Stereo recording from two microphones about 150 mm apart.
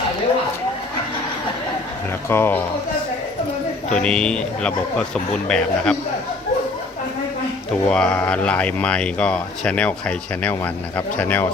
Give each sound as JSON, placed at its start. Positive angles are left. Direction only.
{"t": 2.3, "sound": "speech", "side_deg": 15}
{"t": 3.9, "sound": "speech", "side_deg": 5}
{"t": 7.9, "sound": "speech", "side_deg": 5}